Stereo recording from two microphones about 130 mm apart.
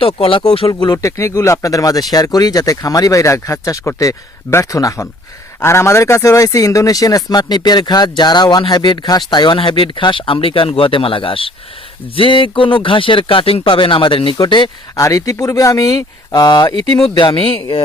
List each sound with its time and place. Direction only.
0.0 s speech: 45° left (ahead or behind)
0.7 s a man's voice: 30° left (ahead or behind)